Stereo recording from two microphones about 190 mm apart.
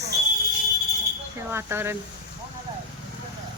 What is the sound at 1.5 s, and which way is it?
Speech, 15° right (ahead or behind).